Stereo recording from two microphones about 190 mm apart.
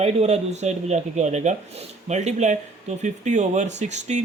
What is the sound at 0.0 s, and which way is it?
Speech, 35° right (ahead or behind).